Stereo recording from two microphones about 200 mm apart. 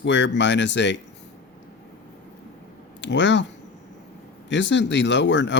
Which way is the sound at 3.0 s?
60° left (ahead or behind).